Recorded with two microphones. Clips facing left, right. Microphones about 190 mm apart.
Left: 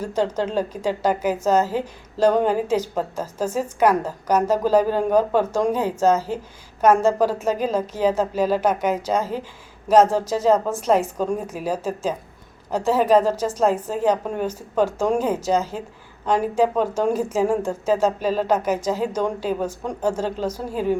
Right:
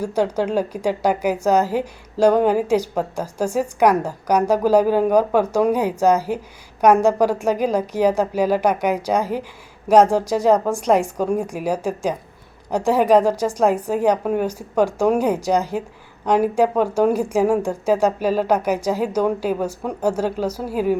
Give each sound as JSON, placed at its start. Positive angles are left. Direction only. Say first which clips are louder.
{"t": 0.0, "sound": "a woman's voice", "louder": "right 2 dB", "side_deg": -10}